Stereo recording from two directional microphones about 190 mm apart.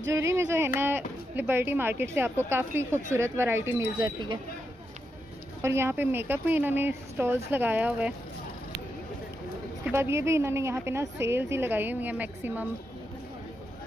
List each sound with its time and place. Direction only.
0.1 s a woman's voice: 15° right (ahead or behind)
4.0 s speech: 25° right (ahead or behind)
5.6 s a woman's voice: 15° right (ahead or behind)
9.8 s a woman's voice: 15° right (ahead or behind)